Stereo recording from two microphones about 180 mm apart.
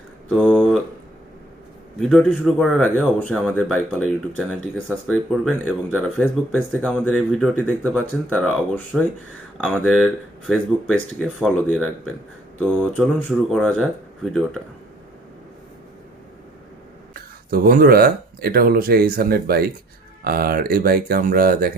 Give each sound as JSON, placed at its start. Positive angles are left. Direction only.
{"t": 0.3, "sound": "a sound", "side_deg": -5}
{"t": 2.0, "sound": "speech", "side_deg": 0}
{"t": 5.3, "sound": "speech", "side_deg": -5}
{"t": 6.0, "sound": "speech", "side_deg": 5}
{"t": 17.2, "sound": "speech", "side_deg": -55}